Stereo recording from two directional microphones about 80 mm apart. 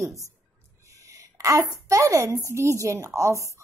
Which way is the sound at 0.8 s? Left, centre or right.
Right.